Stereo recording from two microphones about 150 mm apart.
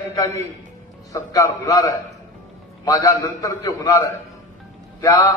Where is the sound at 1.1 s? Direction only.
20° left (ahead or behind).